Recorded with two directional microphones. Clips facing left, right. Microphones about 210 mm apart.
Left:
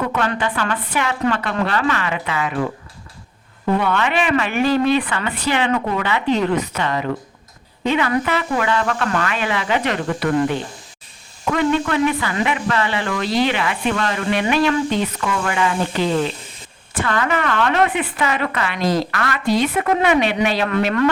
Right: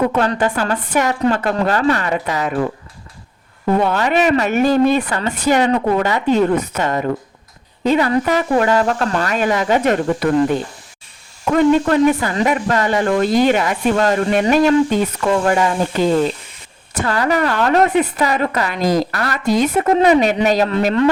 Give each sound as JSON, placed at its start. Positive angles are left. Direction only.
{"t": 0.2, "sound": "speech", "side_deg": -40}
{"t": 3.7, "sound": "speech", "side_deg": -40}